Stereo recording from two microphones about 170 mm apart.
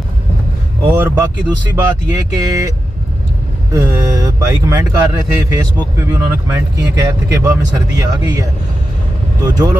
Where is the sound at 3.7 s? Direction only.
15° right (ahead or behind).